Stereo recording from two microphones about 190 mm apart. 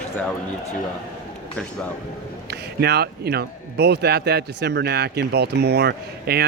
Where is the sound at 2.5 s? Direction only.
60° right (ahead or behind).